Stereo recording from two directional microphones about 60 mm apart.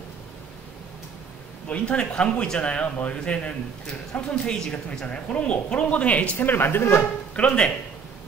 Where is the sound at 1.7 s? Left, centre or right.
Centre.